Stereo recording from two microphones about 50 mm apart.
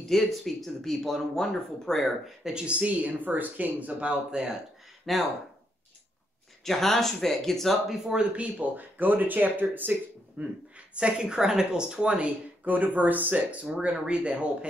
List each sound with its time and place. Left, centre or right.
0.1 s speech: centre
2.4 s speech: centre
5.1 s speech: centre
6.6 s speech: centre
8.0 s a woman's voice: centre
8.4 s speech: right
11.0 s a woman's voice: centre
12.6 s speech: right